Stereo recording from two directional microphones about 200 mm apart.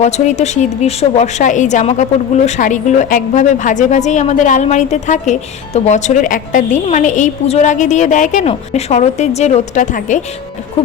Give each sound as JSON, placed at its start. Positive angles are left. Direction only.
{"t": 0.0, "sound": "a woman's voice", "side_deg": 35}